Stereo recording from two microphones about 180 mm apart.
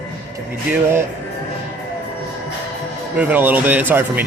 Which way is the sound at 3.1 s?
10° right (ahead or behind).